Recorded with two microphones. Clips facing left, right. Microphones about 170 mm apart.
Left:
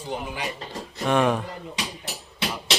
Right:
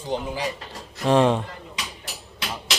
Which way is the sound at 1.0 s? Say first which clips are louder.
Right 3 dB; 30° right (ahead or behind).